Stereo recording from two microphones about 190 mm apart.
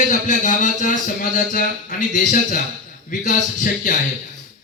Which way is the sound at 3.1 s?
40° left (ahead or behind).